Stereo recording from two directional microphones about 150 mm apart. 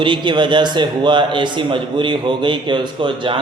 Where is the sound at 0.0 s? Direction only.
30° right (ahead or behind).